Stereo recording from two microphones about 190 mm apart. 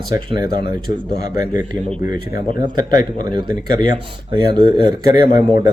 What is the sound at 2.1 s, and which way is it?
Speech, 45° left (ahead or behind).